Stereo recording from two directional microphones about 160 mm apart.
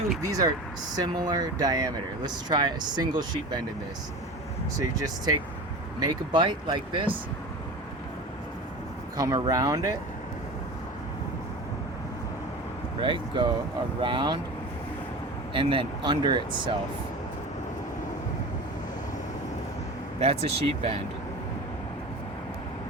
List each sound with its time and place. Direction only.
0.3 s speech: 25° right (ahead or behind)
4.8 s speech: 25° right (ahead or behind)
9.1 s speech: 20° right (ahead or behind)
13.0 s speech: 30° right (ahead or behind)
15.5 s speech: 35° right (ahead or behind)
20.1 s speech: 40° right (ahead or behind)